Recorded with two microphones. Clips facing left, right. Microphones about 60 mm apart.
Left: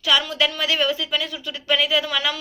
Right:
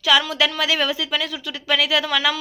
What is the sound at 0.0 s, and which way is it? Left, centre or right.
A woman's voice, right.